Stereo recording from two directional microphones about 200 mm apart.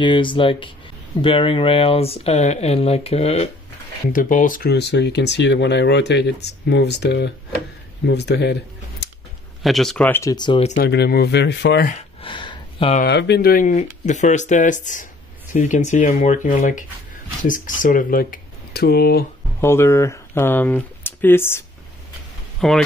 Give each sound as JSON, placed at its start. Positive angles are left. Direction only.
{"t": 0.0, "sound": "speech", "side_deg": 25}
{"t": 4.1, "sound": "speech", "side_deg": 40}
{"t": 9.0, "sound": "a sound", "side_deg": 60}
{"t": 9.6, "sound": "speech", "side_deg": 0}
{"t": 10.3, "sound": "speech", "side_deg": 25}
{"t": 10.8, "sound": "speech", "side_deg": 55}
{"t": 11.9, "sound": "a sound", "side_deg": 25}
{"t": 13.0, "sound": "speech", "side_deg": 55}
{"t": 19.6, "sound": "speech", "side_deg": 10}